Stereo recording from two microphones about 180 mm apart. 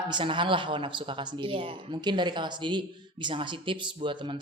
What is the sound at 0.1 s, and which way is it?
Speech, 25° right (ahead or behind).